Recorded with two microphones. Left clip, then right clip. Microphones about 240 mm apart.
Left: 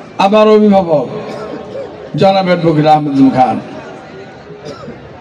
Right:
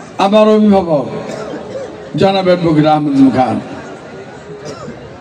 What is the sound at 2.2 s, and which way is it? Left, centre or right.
A man's voice, left.